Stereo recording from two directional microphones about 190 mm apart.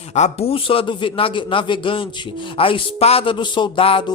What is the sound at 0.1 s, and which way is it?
Speech, 35° left (ahead or behind).